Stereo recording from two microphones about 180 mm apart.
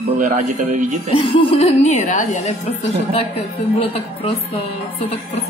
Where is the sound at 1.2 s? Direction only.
30° left (ahead or behind).